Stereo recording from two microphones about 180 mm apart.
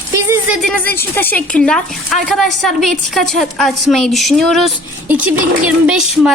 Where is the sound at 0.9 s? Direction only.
10° left (ahead or behind).